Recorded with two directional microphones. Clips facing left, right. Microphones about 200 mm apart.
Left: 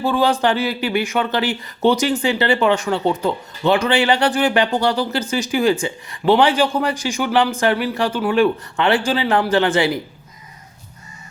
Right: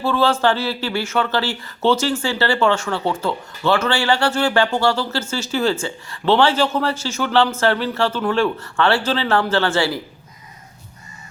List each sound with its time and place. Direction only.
0.0 s speech: 15° left (ahead or behind)